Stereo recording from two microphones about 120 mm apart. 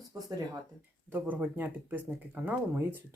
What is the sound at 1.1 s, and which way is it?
Speech, 15° right (ahead or behind).